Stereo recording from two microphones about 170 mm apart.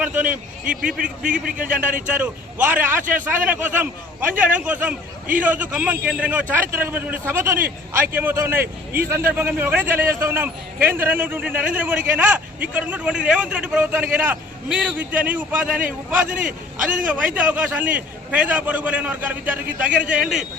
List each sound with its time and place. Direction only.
0.0 s a man's voice: 10° right (ahead or behind)
0.3 s a man's voice: 55° right (ahead or behind)
2.0 s a man's voice: 10° right (ahead or behind)
3.0 s a man's voice: 50° right (ahead or behind)
3.2 s a man's voice: 10° right (ahead or behind)
8.6 s speech: 65° right (ahead or behind)
9.0 s a man's voice: 15° right (ahead or behind)
17.3 s a man's voice: 10° right (ahead or behind)